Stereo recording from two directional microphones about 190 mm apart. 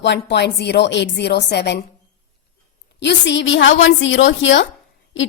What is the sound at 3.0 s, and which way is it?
A woman's voice, 70° left (ahead or behind).